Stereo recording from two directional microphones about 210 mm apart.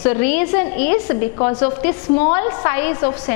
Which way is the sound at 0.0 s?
10° left (ahead or behind).